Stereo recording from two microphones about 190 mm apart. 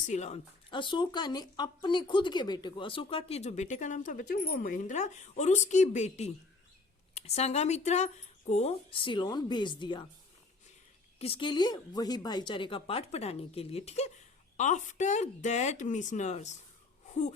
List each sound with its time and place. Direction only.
0.1 s speech: 35° left (ahead or behind)
0.7 s speech: 25° left (ahead or behind)
11.2 s speech: 30° left (ahead or behind)
17.1 s wheeze: 40° left (ahead or behind)